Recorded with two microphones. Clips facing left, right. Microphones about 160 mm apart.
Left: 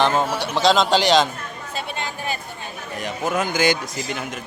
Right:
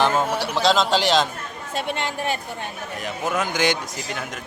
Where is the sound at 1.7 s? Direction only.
75° right (ahead or behind).